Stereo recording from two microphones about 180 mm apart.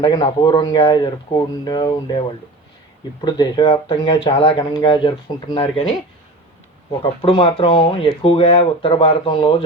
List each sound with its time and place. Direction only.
0.0 s speech: 25° left (ahead or behind)
7.0 s speech: 25° left (ahead or behind)